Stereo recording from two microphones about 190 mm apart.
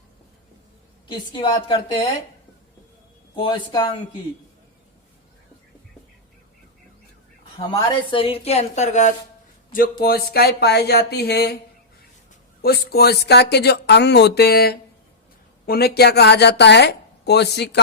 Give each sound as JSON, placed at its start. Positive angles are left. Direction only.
{"t": 1.0, "sound": "a woman's voice", "side_deg": 25}
{"t": 3.4, "sound": "a woman's voice", "side_deg": 25}
{"t": 7.7, "sound": "speech", "side_deg": 25}
{"t": 9.7, "sound": "speech", "side_deg": 50}
{"t": 12.6, "sound": "speech", "side_deg": 55}